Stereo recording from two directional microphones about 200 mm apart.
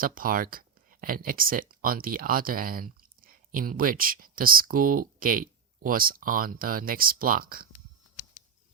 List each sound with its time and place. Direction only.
0.0 s speech: 45° right (ahead or behind)